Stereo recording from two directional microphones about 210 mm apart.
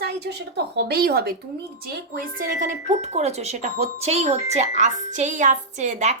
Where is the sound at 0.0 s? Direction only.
50° right (ahead or behind).